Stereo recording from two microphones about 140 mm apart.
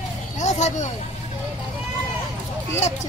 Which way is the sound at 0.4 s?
55° left (ahead or behind).